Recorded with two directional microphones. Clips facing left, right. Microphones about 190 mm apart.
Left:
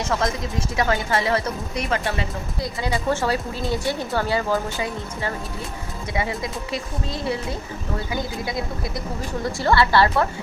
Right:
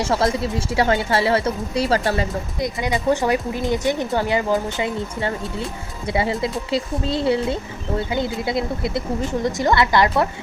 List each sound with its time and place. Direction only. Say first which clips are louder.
0.0 s a woman's voice: right 4 dB; 30° right (ahead or behind)
2.6 s speech: right 3 dB; 20° right (ahead or behind)
6.1 s speech: right 5 dB; 30° right (ahead or behind)